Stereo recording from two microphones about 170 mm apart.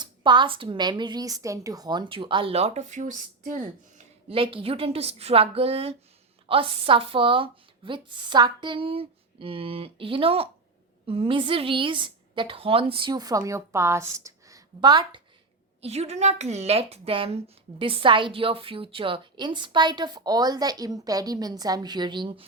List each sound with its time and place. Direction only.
0.0 s a woman's voice: 25° right (ahead or behind); by 4.0 s 45° right (ahead or behind)
4.3 s a woman's voice: 35° right (ahead or behind)
15.8 s a woman's voice: 40° right (ahead or behind)